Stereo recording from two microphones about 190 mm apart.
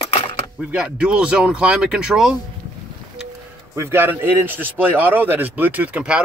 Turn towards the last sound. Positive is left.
turn(degrees=-5)  # may be behind; listen again after turning